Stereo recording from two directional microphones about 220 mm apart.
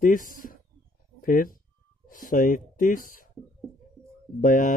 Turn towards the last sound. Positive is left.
turn(degrees=40)  # may be behind; listen again after turning